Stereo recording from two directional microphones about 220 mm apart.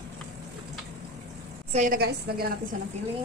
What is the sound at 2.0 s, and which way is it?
Speech, 45° right (ahead or behind).